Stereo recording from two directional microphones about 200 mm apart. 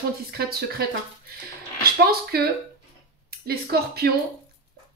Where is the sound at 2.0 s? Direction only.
50° right (ahead or behind).